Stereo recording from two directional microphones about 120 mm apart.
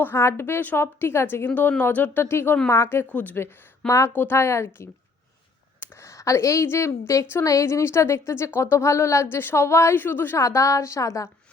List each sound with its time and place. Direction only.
0.0 s a woman's voice: 20° left (ahead or behind)